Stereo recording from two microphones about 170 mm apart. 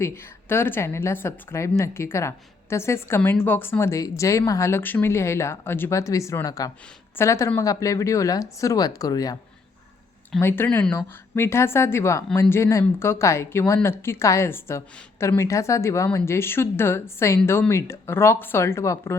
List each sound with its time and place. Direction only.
0.0 s speech: 15° left (ahead or behind)
10.4 s speech: 15° left (ahead or behind)